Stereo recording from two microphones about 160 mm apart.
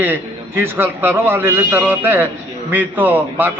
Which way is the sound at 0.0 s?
15° right (ahead or behind).